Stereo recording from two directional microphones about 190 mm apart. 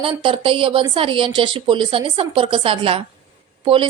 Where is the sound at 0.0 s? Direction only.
25° right (ahead or behind).